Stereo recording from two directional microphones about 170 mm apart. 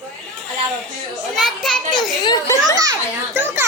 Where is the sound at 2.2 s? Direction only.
20° left (ahead or behind).